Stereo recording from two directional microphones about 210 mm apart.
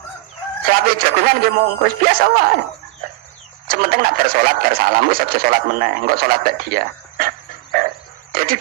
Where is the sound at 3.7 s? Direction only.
45° right (ahead or behind).